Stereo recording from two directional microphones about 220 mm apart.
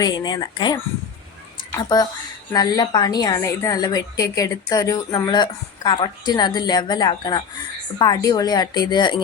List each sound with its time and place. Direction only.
0.0 s a woman's voice: 20° left (ahead or behind)
2.5 s a woman's voice: 15° left (ahead or behind)